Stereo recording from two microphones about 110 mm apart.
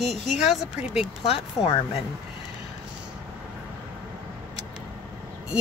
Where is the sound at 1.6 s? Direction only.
30° left (ahead or behind).